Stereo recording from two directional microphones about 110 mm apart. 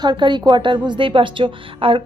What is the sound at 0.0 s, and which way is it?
A woman's voice, 45° right (ahead or behind).